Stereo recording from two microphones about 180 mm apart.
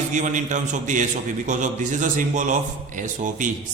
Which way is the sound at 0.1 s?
45° right (ahead or behind).